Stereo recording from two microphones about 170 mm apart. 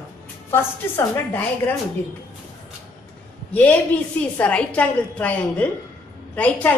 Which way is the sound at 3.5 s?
10° left (ahead or behind).